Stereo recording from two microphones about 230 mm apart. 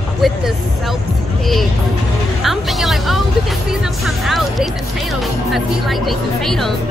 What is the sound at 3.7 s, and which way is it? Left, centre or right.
Music, centre.